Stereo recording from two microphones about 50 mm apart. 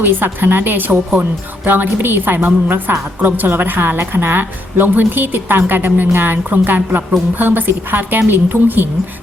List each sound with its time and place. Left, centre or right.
0.0 s a woman's voice: right